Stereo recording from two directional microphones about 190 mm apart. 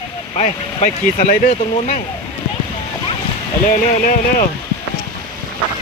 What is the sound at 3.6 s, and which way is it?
Speech, 45° left (ahead or behind).